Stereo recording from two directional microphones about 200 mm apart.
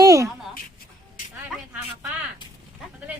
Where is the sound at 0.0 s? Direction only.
15° right (ahead or behind).